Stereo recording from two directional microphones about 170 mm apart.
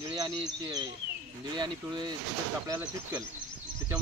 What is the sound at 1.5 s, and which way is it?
Speech, 25° right (ahead or behind).